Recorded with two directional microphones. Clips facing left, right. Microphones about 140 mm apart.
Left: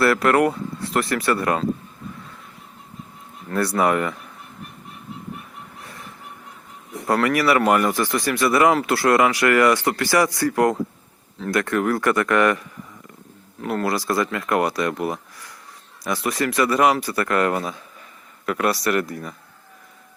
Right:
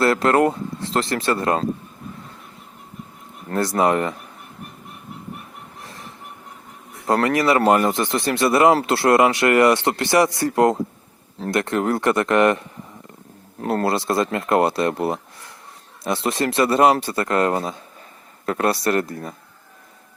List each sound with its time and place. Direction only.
0.0 s speech: 25° right (ahead or behind)
3.5 s speech: 25° right (ahead or behind)
7.1 s speech: 25° right (ahead or behind)
13.6 s speech: 35° right (ahead or behind)